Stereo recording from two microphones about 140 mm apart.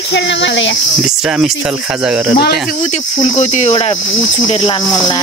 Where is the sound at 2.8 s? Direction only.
55° left (ahead or behind).